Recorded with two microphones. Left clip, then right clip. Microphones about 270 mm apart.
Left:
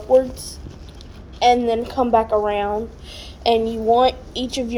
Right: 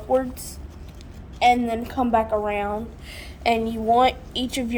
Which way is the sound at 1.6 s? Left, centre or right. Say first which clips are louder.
Left 5 dB; right.